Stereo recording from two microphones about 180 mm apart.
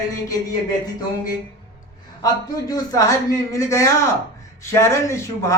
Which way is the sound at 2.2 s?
20° left (ahead or behind).